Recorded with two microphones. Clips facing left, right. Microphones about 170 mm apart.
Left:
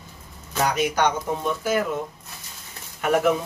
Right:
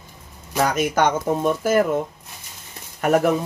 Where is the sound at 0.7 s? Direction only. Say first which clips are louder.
Right 2 dB; 50° right (ahead or behind).